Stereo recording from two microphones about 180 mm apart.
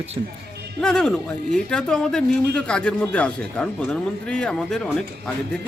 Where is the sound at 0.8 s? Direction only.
5° left (ahead or behind).